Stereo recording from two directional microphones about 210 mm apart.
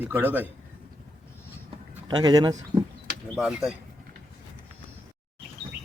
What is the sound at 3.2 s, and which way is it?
Speech, centre (ahead or behind).